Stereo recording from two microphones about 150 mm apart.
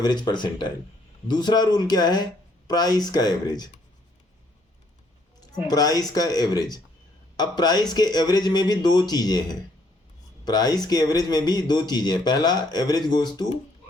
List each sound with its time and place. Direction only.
0.0 s speech: 30° left (ahead or behind)
5.6 s speech: 25° left (ahead or behind)